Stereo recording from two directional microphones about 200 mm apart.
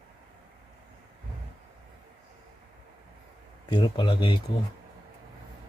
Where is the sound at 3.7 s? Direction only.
20° left (ahead or behind).